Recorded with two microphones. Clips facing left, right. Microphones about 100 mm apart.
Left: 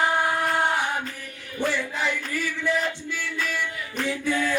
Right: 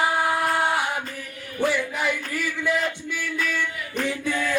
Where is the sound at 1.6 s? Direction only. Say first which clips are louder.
Right 2 dB; 15° right (ahead or behind).